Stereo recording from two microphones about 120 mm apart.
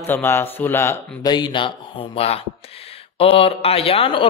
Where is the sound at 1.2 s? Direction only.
35° left (ahead or behind).